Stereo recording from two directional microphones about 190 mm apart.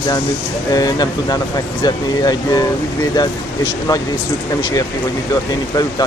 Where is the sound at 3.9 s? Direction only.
15° left (ahead or behind).